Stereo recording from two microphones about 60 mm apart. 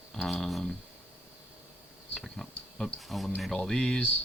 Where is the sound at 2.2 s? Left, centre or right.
Centre.